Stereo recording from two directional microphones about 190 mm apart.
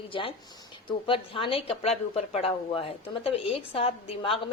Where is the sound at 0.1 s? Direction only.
25° left (ahead or behind).